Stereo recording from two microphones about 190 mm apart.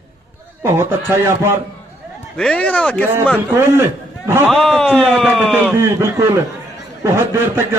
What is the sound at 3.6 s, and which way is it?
Speech, 10° right (ahead or behind).